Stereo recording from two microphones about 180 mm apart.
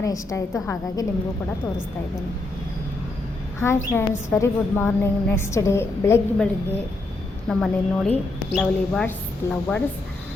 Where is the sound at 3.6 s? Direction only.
15° left (ahead or behind).